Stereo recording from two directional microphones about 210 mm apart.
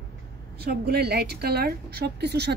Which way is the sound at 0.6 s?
50° right (ahead or behind).